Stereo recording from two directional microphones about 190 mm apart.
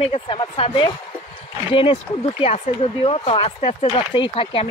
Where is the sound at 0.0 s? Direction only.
30° left (ahead or behind).